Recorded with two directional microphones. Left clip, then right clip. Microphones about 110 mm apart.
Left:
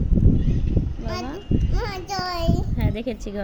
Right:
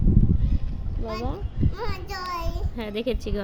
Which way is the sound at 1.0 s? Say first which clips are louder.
Right 2 dB; 40° right (ahead or behind).